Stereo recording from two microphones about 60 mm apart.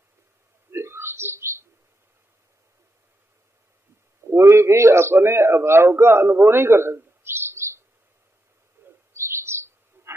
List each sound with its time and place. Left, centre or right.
0.7 s a sound: right
4.2 s a man's voice: right
8.8 s bird: right
9.1 s chirp: right